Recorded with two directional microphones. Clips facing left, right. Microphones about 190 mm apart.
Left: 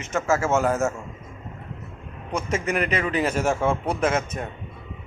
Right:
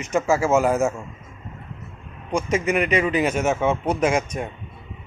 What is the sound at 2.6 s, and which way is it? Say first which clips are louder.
Speech: right 3 dB; 10° right (ahead or behind).